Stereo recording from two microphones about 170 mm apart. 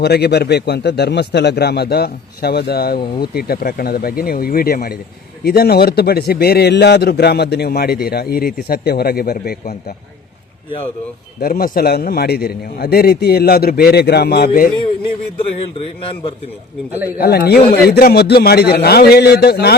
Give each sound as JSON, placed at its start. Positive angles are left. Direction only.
{"t": 0.0, "sound": "a man's voice", "side_deg": 75}
{"t": 11.3, "sound": "a man's voice", "side_deg": 60}
{"t": 17.2, "sound": "speech", "side_deg": 70}